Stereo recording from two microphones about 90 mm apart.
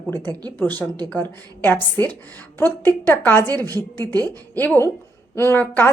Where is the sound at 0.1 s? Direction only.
25° left (ahead or behind).